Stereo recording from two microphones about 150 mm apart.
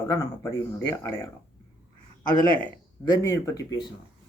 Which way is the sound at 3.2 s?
20° left (ahead or behind).